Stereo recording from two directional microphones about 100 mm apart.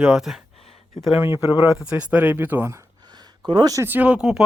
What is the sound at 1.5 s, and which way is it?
Speech, 50° left (ahead or behind).